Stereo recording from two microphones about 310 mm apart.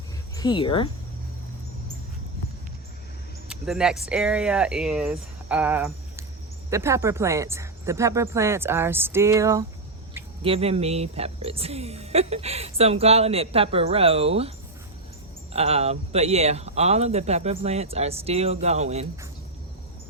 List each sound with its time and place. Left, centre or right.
0.3 s speech: centre
3.5 s speech: centre
15.5 s speech: centre